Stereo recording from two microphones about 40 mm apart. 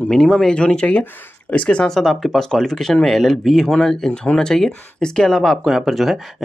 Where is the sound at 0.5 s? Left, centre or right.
Left.